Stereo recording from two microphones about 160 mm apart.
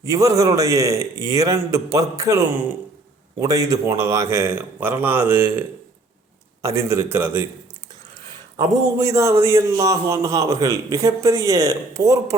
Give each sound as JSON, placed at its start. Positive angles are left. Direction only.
{"t": 0.0, "sound": "a man's voice", "side_deg": -20}
{"t": 9.0, "sound": "a man's voice", "side_deg": -20}